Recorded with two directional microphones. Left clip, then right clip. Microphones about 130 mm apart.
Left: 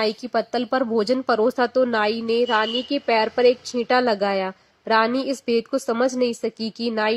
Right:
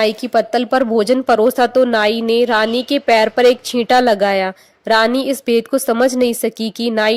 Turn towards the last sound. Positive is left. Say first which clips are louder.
# right 7 dB
turn(degrees=-50)  # may be behind; listen again after turning